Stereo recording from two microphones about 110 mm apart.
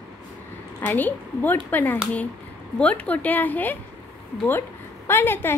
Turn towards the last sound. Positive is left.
turn(degrees=20)  # may be behind; listen again after turning